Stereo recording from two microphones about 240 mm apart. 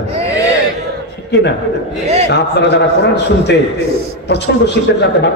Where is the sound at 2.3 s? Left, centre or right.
Left.